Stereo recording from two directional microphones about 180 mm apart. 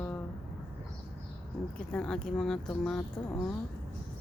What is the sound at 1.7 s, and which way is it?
Speech, 5° left (ahead or behind).